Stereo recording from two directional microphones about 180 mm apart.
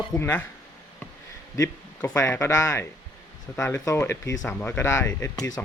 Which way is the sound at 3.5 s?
5° left (ahead or behind).